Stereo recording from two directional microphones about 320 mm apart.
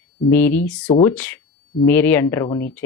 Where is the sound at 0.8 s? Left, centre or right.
Centre.